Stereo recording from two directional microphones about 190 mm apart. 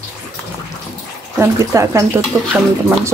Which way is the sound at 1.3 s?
15° right (ahead or behind).